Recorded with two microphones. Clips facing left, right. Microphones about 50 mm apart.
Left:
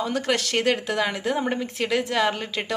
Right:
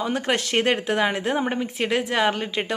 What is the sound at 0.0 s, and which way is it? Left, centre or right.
A woman's voice, right.